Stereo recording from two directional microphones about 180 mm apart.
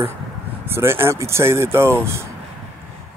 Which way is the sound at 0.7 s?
15° right (ahead or behind).